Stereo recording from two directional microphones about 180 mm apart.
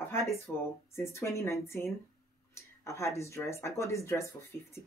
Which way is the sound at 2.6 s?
15° left (ahead or behind).